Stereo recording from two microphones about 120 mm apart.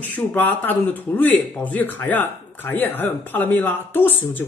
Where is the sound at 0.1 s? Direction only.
15° left (ahead or behind).